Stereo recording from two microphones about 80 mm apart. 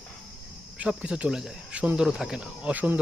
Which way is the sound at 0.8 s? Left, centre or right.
Centre.